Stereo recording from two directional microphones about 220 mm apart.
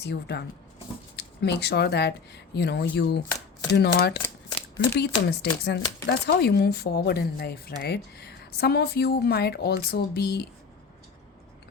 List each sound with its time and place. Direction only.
0.0 s speech: 50° left (ahead or behind)